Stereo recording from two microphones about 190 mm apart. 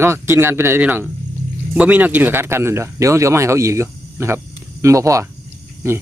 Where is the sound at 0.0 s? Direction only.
15° right (ahead or behind).